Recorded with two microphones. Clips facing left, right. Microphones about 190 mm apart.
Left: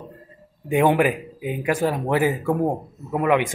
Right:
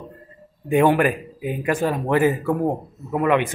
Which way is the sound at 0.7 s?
10° left (ahead or behind).